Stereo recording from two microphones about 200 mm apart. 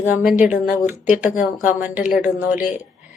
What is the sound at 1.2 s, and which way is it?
Speech, 40° left (ahead or behind).